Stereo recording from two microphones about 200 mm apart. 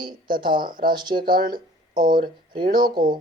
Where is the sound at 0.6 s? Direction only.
45° right (ahead or behind).